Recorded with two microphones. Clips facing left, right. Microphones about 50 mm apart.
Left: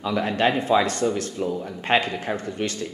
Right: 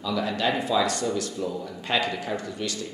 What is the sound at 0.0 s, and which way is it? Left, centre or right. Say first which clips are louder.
A man's voice: left 4 dB; left.